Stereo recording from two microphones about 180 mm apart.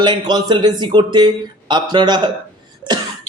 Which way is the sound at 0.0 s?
25° right (ahead or behind).